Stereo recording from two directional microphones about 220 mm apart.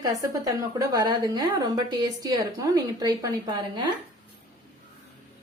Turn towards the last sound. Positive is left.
turn(degrees=-20)  # may be behind; listen again after turning